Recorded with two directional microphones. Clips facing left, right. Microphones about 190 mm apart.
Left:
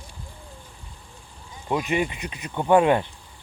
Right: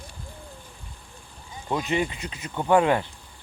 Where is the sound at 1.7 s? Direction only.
15° left (ahead or behind).